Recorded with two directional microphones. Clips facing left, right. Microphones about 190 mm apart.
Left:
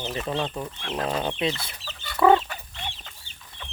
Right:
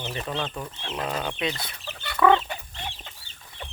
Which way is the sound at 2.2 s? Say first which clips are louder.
Left 2 dB; 30° left (ahead or behind).